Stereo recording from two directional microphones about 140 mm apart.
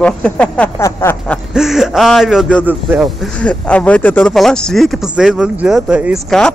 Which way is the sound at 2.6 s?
10° right (ahead or behind).